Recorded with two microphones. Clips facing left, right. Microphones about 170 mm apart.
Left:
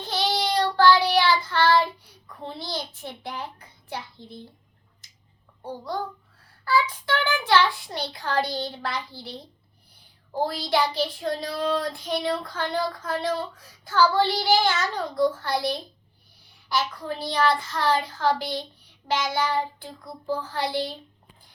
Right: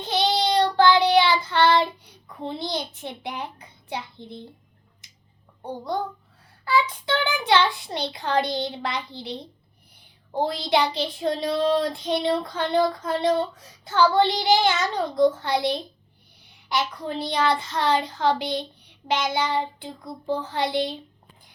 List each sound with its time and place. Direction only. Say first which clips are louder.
0.0 s child singing: right 3 dB; 20° right (ahead or behind)
3.8 s a child's voice: right 3 dB; 20° right (ahead or behind)
5.6 s child singing: right 3 dB; 20° right (ahead or behind)